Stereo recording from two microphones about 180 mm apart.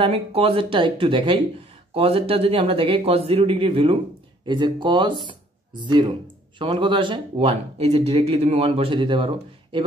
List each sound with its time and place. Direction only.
0.0 s speech: 35° right (ahead or behind)